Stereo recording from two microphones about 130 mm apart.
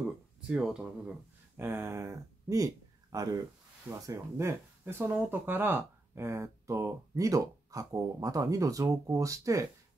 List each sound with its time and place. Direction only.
0.5 s speech: 5° right (ahead or behind)
1.6 s speech: 20° right (ahead or behind)